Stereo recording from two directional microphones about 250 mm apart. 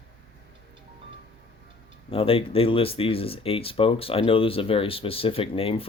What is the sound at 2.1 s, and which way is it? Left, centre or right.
Speech, left.